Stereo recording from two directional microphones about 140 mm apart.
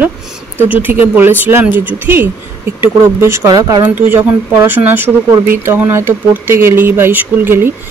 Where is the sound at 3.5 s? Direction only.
30° right (ahead or behind).